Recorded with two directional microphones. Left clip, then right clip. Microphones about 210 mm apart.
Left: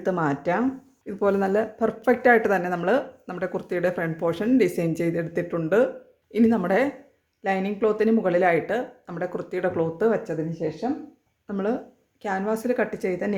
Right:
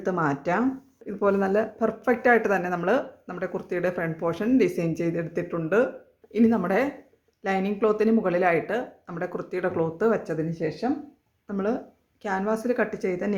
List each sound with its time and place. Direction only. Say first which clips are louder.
0.0 s speech: left 1 dB; 5° left (ahead or behind)
11.4 s speech: left 1 dB; 5° left (ahead or behind)